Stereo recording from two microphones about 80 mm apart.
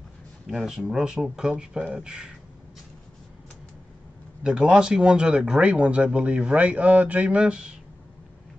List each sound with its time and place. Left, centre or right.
0.5 s speech: centre
4.4 s speech: centre